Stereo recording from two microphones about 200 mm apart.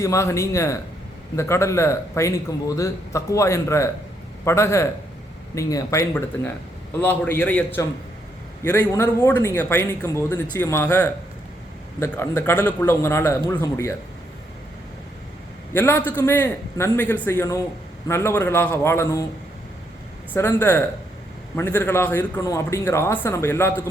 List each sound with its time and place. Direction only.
0.0 s a man's voice: 15° left (ahead or behind)
15.7 s a man's voice: 10° left (ahead or behind)
20.3 s a man's voice: 10° left (ahead or behind)